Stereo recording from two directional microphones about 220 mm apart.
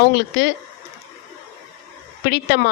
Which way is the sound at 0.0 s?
50° left (ahead or behind).